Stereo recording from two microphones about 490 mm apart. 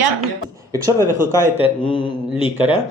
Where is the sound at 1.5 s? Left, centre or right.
Centre.